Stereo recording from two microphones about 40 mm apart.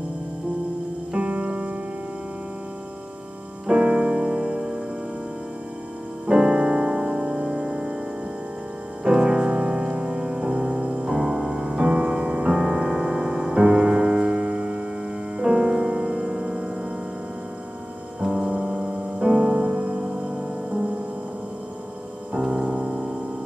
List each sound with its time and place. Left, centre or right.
1.1 s music: right
3.6 s music: right
6.2 s music: right
9.0 s music: right
11.1 s music: centre
18.2 s music: centre; by 20.1 s right
22.3 s music: right